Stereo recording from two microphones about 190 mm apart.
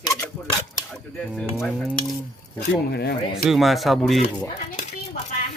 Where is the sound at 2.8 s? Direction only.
60° left (ahead or behind).